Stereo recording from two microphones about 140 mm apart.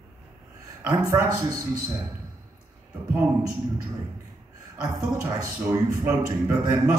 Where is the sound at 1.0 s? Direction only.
20° right (ahead or behind).